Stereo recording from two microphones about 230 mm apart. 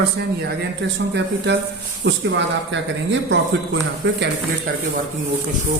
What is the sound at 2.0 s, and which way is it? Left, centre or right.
Speech, right.